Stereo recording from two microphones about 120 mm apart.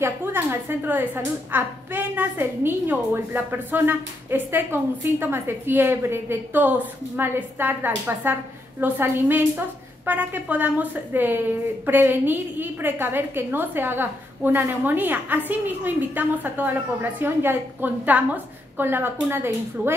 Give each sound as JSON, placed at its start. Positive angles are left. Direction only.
{"t": 0.0, "sound": "a woman's voice", "side_deg": -20}